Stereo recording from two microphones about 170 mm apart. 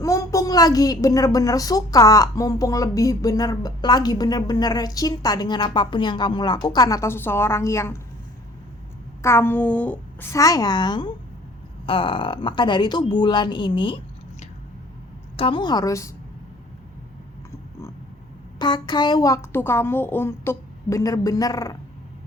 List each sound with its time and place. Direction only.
0.0 s a woman's voice: 20° left (ahead or behind)
9.2 s a woman's voice: 15° left (ahead or behind)
18.6 s a woman's voice: 25° left (ahead or behind)